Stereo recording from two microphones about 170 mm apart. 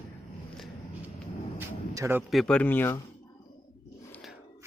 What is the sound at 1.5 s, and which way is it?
Vehicle, 15° right (ahead or behind).